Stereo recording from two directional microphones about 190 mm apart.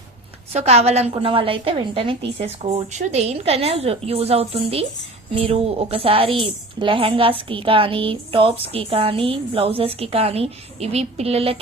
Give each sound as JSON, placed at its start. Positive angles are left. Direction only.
{"t": 0.5, "sound": "a woman's voice", "side_deg": -35}